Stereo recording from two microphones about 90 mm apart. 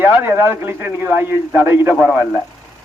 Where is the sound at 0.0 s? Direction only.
25° right (ahead or behind).